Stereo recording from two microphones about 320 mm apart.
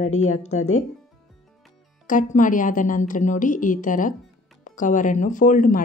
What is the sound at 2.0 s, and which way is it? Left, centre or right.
A woman's voice, left.